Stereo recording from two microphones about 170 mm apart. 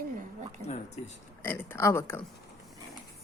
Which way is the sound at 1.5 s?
10° left (ahead or behind).